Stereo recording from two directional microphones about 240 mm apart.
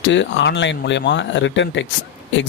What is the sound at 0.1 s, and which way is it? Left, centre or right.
Speech, left.